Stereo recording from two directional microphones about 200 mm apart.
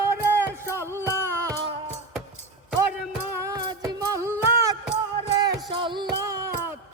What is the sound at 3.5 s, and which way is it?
Music, 15° right (ahead or behind).